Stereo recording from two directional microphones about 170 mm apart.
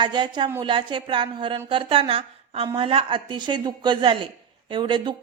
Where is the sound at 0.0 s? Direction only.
25° right (ahead or behind).